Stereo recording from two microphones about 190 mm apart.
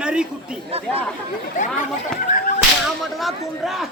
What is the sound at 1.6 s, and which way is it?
Speech, 40° left (ahead or behind).